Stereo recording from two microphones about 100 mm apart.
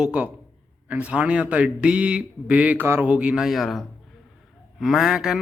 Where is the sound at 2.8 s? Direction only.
25° right (ahead or behind).